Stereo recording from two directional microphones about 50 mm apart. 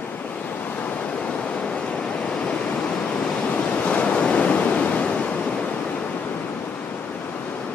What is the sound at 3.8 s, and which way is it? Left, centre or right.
Waves, left.